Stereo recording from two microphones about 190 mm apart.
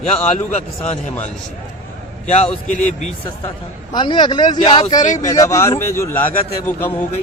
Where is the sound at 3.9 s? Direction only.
25° left (ahead or behind).